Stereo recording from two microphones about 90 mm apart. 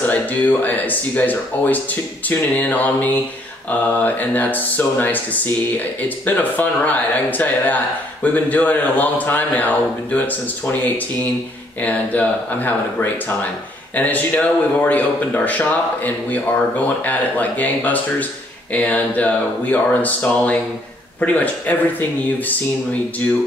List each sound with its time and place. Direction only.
0.0 s speech: 20° left (ahead or behind)